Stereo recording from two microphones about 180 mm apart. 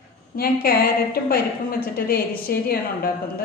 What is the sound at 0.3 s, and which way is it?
A woman's voice, 55° left (ahead or behind).